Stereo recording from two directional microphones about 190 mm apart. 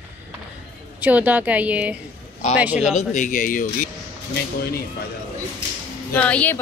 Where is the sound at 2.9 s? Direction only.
40° left (ahead or behind).